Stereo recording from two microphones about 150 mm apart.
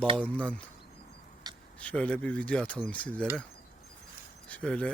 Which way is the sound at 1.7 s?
10° left (ahead or behind).